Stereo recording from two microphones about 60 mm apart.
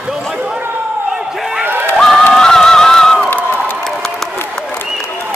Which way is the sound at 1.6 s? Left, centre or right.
Right.